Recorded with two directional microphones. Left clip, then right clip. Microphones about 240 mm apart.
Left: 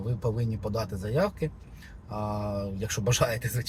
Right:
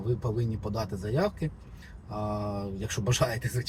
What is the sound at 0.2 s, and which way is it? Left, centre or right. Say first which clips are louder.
Speech: left 2 dB; left.